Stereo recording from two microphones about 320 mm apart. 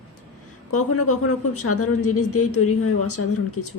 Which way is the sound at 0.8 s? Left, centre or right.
Left.